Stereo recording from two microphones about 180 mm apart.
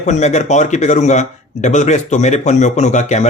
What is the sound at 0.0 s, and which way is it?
Speech, 40° left (ahead or behind).